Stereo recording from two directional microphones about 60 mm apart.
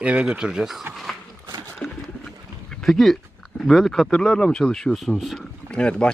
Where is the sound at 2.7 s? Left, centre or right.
Centre.